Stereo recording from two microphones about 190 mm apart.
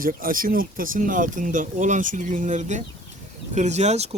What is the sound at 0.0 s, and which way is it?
Speech, 45° right (ahead or behind).